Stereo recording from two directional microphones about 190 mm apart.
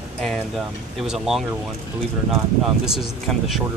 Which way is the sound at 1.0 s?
5° right (ahead or behind).